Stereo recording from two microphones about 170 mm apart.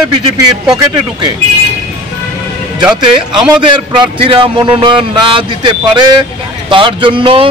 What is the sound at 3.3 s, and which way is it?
Speech, 5° right (ahead or behind).